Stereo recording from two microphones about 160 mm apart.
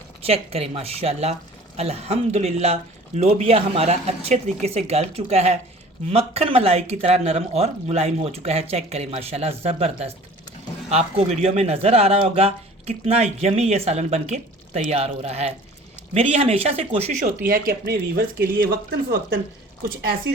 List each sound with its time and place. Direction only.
0.2 s speech: 40° right (ahead or behind)
17.2 s speech: 65° right (ahead or behind)